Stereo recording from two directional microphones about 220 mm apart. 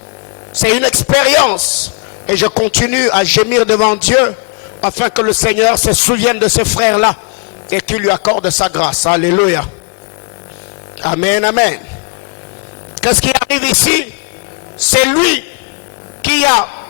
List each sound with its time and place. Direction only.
0.6 s a man's voice: 10° left (ahead or behind)
8.2 s speech: 25° left (ahead or behind)
8.6 s a man's voice: 10° left (ahead or behind)
11.0 s a man's voice: 10° left (ahead or behind)
13.0 s a man's voice: 10° left (ahead or behind)
16.2 s a sound: 10° left (ahead or behind)